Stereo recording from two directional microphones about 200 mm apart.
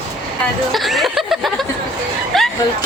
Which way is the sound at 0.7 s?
Centre (ahead or behind).